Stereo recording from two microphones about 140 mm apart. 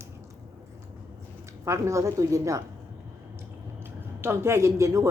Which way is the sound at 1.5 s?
20° right (ahead or behind).